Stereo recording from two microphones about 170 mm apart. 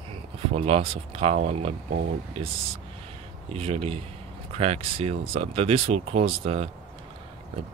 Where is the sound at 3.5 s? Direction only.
35° right (ahead or behind).